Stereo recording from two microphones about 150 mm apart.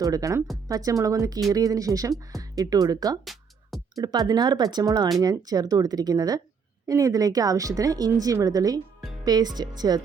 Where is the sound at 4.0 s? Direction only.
25° right (ahead or behind).